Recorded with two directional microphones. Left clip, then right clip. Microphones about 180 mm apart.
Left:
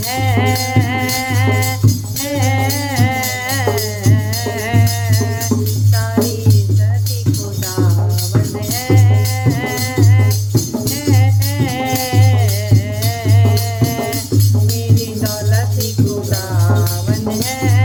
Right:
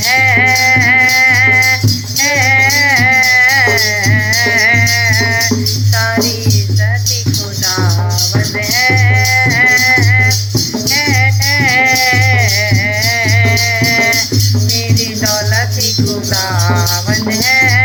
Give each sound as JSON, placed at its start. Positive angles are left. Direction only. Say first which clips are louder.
{"t": 0.2, "sound": "music", "louder": "right 9 dB", "side_deg": 40}
{"t": 9.4, "sound": "music", "louder": "right 12 dB", "side_deg": 35}